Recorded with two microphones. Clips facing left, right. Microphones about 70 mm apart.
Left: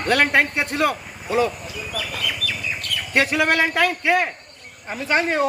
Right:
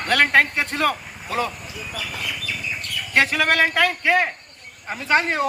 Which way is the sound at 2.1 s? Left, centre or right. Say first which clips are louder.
Left 2 dB; left.